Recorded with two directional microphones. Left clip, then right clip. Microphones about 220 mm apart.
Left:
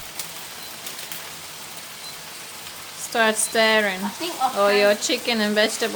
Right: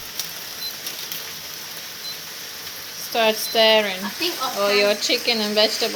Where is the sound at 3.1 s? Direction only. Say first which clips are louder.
Right 1 dB; 10° left (ahead or behind).